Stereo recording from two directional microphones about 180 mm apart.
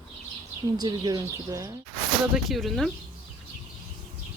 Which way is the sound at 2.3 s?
Centre (ahead or behind).